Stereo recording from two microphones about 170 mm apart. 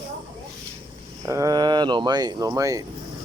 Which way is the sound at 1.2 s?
20° right (ahead or behind).